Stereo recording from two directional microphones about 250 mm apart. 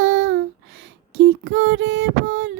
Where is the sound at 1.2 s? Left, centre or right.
Right.